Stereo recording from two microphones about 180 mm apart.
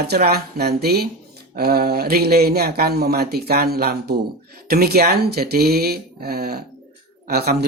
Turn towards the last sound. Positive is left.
turn(degrees=-60)  # may be behind; listen again after turning